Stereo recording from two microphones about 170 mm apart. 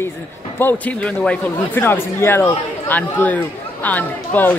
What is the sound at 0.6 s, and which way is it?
Speech, 10° left (ahead or behind).